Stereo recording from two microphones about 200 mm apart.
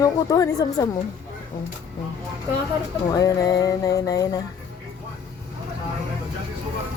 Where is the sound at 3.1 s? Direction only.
20° left (ahead or behind).